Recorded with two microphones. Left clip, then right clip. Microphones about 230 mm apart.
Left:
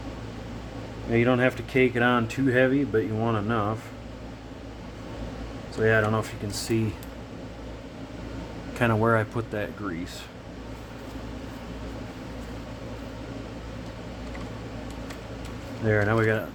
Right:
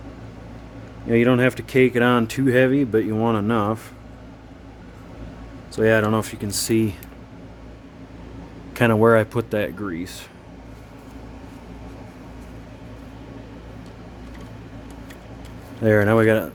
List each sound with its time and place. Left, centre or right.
1.1 s speech: right
5.7 s speech: right
8.7 s speech: right
15.9 s speech: right